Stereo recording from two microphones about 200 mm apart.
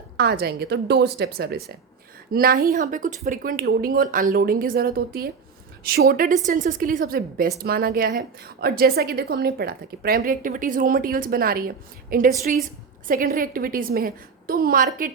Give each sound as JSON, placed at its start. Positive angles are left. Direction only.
{"t": 0.2, "sound": "a woman's voice", "side_deg": -55}